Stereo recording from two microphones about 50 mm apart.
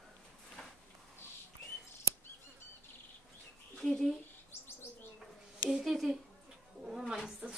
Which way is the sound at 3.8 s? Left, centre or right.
Centre.